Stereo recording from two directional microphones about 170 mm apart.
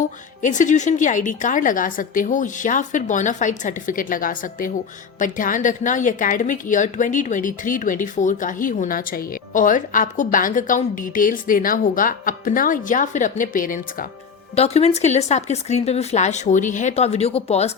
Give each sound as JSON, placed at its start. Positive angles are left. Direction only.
{"t": 0.4, "sound": "a woman's voice", "side_deg": 45}
{"t": 14.5, "sound": "speech", "side_deg": 40}